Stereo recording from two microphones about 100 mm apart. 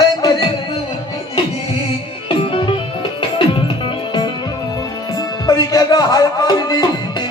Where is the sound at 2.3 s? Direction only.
55° left (ahead or behind).